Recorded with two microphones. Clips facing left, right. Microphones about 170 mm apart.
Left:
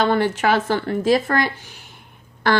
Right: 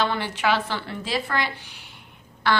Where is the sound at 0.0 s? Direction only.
50° left (ahead or behind).